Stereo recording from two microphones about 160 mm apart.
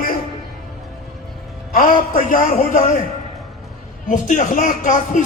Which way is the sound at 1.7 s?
60° left (ahead or behind).